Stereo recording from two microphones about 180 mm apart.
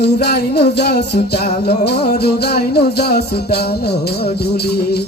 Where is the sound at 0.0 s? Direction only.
65° left (ahead or behind).